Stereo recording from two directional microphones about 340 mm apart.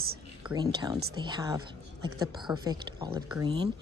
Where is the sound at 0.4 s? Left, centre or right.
Centre.